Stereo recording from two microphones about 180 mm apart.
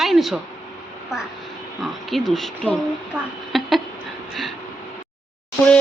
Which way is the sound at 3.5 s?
Centre (ahead or behind).